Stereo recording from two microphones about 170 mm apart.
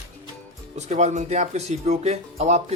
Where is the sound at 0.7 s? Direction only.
40° right (ahead or behind).